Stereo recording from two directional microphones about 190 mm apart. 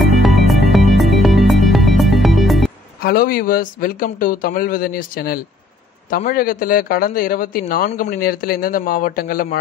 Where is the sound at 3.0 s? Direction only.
50° left (ahead or behind).